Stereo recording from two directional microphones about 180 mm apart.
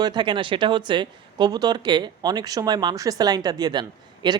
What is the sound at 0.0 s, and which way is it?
Speech, 25° right (ahead or behind).